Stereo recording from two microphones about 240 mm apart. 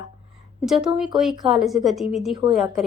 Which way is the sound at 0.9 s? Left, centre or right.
Centre.